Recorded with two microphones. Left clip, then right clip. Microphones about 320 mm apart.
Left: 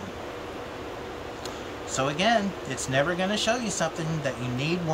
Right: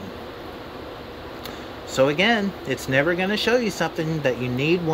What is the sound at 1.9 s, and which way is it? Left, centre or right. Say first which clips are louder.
Speech: right 5 dB; centre.